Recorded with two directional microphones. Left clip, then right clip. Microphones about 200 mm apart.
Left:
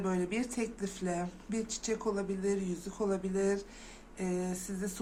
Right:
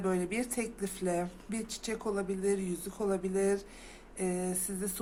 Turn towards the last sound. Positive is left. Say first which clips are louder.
# right 2 dB
turn(degrees=-20)  # may be behind; listen again after turning